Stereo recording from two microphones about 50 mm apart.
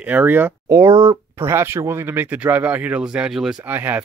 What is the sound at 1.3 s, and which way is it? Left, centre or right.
Speech, right.